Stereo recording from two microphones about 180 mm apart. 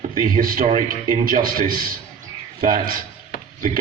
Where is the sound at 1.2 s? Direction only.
50° right (ahead or behind).